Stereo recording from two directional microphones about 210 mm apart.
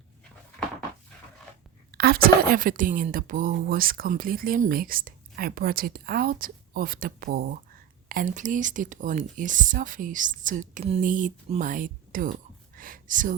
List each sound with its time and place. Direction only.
1.9 s a woman's voice: 50° right (ahead or behind)